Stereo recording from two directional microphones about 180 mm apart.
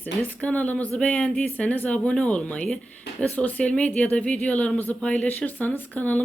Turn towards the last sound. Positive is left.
turn(degrees=10)  # may be behind; listen again after turning